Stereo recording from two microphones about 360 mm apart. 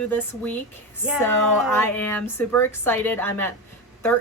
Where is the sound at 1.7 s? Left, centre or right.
Centre.